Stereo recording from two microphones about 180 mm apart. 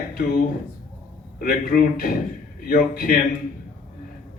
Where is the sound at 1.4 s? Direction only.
55° left (ahead or behind).